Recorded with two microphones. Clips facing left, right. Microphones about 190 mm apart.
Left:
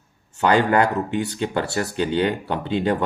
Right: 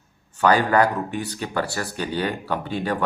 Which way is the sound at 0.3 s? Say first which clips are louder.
Even; 25° left (ahead or behind).